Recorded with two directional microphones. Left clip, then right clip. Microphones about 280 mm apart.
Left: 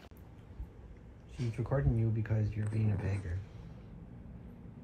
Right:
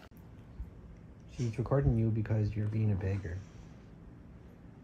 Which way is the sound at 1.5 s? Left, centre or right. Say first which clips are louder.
Right 3 dB; right.